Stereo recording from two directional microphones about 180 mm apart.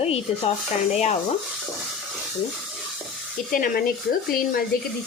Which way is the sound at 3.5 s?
50° left (ahead or behind).